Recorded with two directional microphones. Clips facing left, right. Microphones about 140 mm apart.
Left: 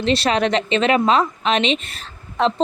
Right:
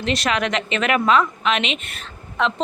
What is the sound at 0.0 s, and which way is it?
A woman's voice, 30° left (ahead or behind).